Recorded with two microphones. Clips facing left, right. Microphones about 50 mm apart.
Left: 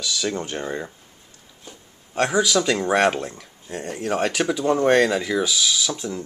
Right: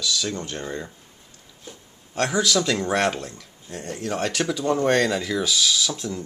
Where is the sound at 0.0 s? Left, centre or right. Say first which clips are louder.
Left 1 dB; centre.